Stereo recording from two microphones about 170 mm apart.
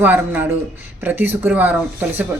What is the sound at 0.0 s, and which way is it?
Speech, 10° right (ahead or behind).